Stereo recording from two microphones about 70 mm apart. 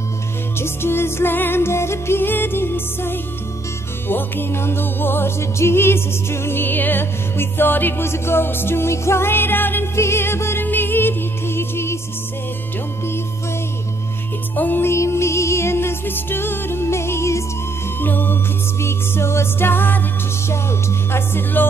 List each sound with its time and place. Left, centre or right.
0.6 s music: left
14.5 s music: left
18.0 s music: left
21.1 s music: left